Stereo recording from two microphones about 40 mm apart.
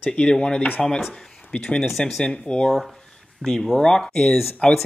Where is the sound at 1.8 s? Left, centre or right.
Centre.